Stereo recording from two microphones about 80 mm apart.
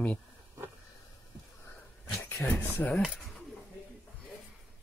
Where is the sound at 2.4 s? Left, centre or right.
Left.